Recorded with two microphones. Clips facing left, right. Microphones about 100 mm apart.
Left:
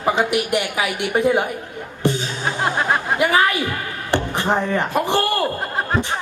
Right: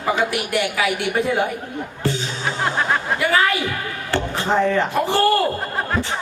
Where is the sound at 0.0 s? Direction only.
20° left (ahead or behind).